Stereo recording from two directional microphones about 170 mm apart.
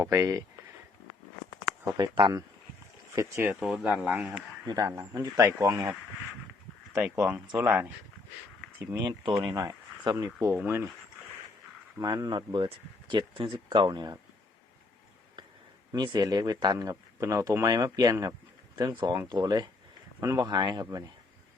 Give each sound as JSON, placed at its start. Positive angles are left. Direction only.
{"t": 0.0, "sound": "speech", "side_deg": -15}
{"t": 1.8, "sound": "speech", "side_deg": -20}
{"t": 3.2, "sound": "speech", "side_deg": -15}
{"t": 3.6, "sound": "speech", "side_deg": 0}
{"t": 4.6, "sound": "speech", "side_deg": -20}
{"t": 7.0, "sound": "speech", "side_deg": -10}
{"t": 10.5, "sound": "speech", "side_deg": -10}
{"t": 11.9, "sound": "speech", "side_deg": -20}
{"t": 15.9, "sound": "speech", "side_deg": -25}